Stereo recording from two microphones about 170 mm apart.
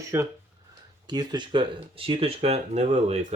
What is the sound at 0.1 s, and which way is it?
Speech, 15° right (ahead or behind).